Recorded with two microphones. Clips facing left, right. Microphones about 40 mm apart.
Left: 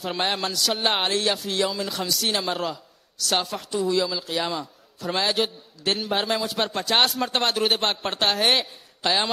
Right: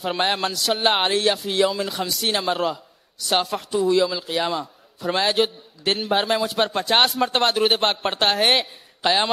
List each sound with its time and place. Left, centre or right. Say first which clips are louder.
0.0 s a man's voice: right 3 dB; centre